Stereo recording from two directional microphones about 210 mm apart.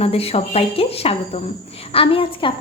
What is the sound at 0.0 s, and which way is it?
A woman's voice, 30° left (ahead or behind).